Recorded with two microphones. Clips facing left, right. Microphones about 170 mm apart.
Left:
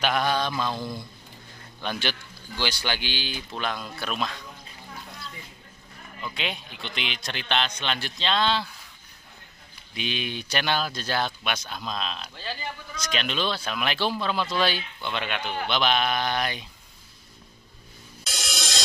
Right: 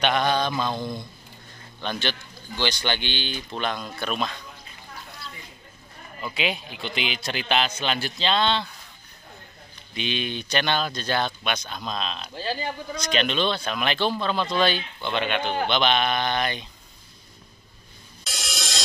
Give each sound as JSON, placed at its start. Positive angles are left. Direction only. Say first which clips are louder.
{"t": 0.0, "sound": "a man's voice", "louder": "right 2 dB", "side_deg": 5}
{"t": 6.2, "sound": "a man's voice", "louder": "right 5 dB", "side_deg": -5}
{"t": 9.9, "sound": "a man's voice", "louder": "right 3 dB", "side_deg": 5}
{"t": 15.4, "sound": "speech", "louder": "right 5 dB", "side_deg": -30}
{"t": 15.7, "sound": "a man's voice", "louder": "even", "side_deg": 0}
{"t": 18.2, "sound": "music", "louder": "even", "side_deg": 0}